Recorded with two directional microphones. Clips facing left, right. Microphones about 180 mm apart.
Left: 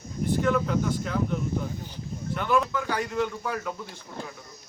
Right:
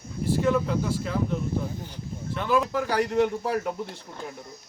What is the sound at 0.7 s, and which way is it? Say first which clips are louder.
Speech: even; 30° right (ahead or behind).